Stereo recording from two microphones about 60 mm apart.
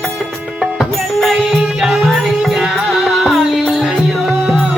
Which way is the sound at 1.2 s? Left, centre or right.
Centre.